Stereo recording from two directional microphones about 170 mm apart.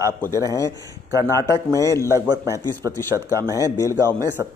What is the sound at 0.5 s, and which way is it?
Speech, 20° left (ahead or behind).